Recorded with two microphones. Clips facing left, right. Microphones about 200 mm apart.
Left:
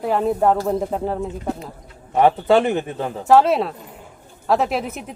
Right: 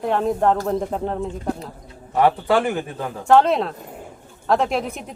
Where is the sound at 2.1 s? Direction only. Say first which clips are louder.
Left 3 dB; 20° left (ahead or behind).